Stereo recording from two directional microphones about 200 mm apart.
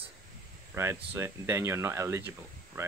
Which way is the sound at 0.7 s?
15° right (ahead or behind).